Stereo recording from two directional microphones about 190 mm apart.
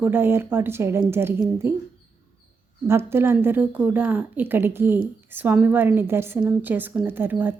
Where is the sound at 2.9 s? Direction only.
15° right (ahead or behind).